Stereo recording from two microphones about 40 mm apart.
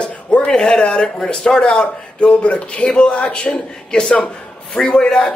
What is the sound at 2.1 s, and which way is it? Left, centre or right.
A man's voice, left.